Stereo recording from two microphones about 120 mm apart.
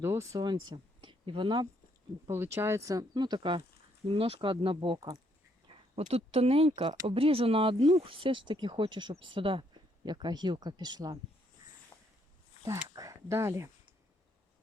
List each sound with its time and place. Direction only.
0.0 s speech: 25° right (ahead or behind); by 1.6 s 40° right (ahead or behind)
2.3 s speech: 20° right (ahead or behind); by 3.6 s 40° right (ahead or behind)
4.1 s speech: 50° right (ahead or behind)
6.0 s speech: 60° right (ahead or behind); by 11.2 s 35° right (ahead or behind)
11.9 s a sound: 40° left (ahead or behind)
12.9 s a sound: 30° right (ahead or behind)